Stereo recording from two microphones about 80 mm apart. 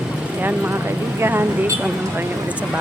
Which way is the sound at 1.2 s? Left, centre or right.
Right.